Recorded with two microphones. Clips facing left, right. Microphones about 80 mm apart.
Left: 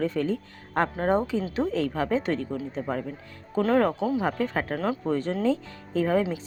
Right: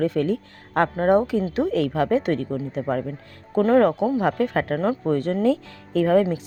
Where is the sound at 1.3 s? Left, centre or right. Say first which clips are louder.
Right 5 dB; right.